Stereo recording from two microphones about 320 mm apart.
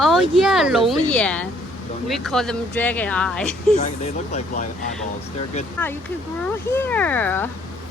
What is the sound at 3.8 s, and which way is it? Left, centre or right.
Speech, left.